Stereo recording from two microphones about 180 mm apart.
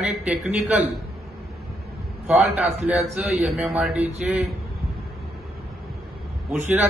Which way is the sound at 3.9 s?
35° right (ahead or behind).